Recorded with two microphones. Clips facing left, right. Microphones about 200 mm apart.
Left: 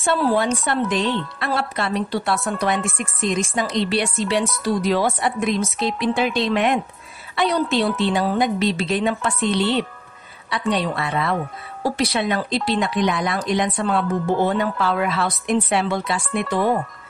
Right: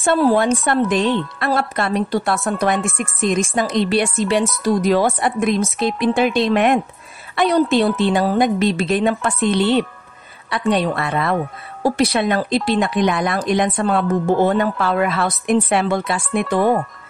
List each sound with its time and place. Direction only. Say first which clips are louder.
0.0 s speech: right 4 dB; 50° right (ahead or behind)